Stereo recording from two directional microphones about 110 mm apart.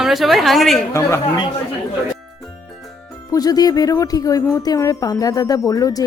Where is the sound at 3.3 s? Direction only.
35° left (ahead or behind).